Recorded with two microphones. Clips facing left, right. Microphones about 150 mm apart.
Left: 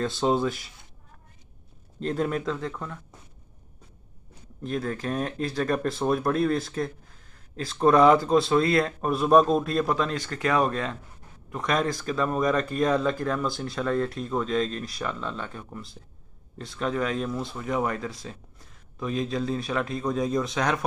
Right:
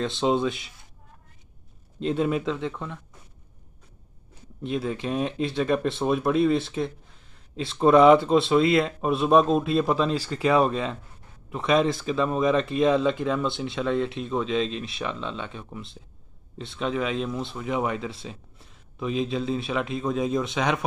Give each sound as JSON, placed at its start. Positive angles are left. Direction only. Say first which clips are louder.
{"t": 0.2, "sound": "speech", "louder": "right 1 dB", "side_deg": 0}
{"t": 2.0, "sound": "speech", "louder": "right 2 dB", "side_deg": -5}
{"t": 4.6, "sound": "speech", "louder": "right 1 dB", "side_deg": -5}
{"t": 9.9, "sound": "speech", "louder": "right 3 dB", "side_deg": -30}
{"t": 11.5, "sound": "speech", "louder": "right 4 dB", "side_deg": -5}